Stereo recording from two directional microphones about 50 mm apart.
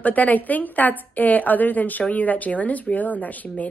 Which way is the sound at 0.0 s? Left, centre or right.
Left.